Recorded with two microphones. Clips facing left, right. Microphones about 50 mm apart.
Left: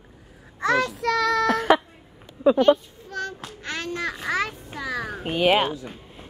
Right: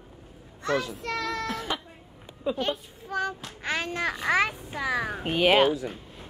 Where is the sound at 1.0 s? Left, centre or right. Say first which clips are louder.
Left 9 dB; left.